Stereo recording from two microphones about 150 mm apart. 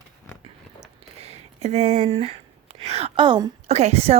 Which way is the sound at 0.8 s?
45° right (ahead or behind).